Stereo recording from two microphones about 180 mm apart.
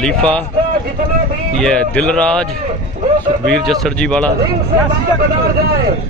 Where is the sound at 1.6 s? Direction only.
5° left (ahead or behind).